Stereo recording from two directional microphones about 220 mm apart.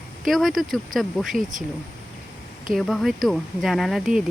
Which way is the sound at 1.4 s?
35° right (ahead or behind).